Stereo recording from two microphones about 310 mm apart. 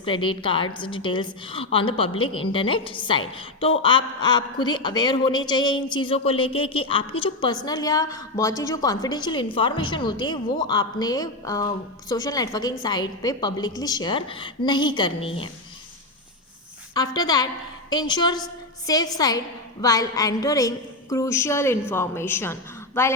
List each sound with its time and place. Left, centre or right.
0.0 s a woman's voice: centre
16.9 s a woman's voice: centre